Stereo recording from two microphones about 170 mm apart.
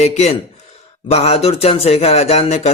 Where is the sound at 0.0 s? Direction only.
40° left (ahead or behind).